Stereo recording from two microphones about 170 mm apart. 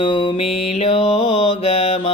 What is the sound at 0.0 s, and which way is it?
Mantra, 30° left (ahead or behind).